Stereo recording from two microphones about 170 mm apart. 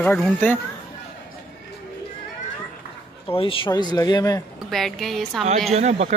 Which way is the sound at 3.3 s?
30° left (ahead or behind).